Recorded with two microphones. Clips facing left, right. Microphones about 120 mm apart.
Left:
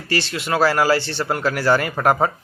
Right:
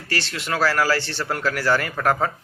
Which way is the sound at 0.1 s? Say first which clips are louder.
Left 4 dB; 15° left (ahead or behind).